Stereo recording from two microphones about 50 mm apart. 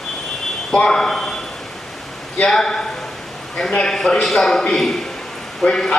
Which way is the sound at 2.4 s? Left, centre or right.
Centre.